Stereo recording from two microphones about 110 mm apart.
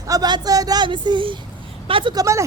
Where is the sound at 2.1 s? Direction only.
25° right (ahead or behind).